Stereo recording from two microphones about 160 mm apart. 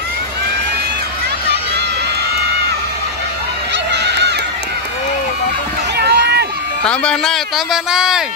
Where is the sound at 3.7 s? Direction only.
90° right.